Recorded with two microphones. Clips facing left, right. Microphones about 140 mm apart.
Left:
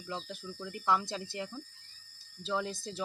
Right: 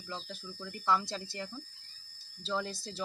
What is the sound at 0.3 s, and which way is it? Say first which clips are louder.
Speech: left 2 dB; 10° left (ahead or behind).